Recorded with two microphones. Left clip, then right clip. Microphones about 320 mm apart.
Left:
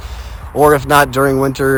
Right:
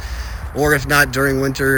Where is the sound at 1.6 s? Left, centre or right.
Left.